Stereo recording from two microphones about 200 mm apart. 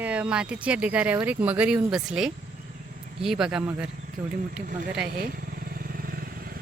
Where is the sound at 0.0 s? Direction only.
5° right (ahead or behind).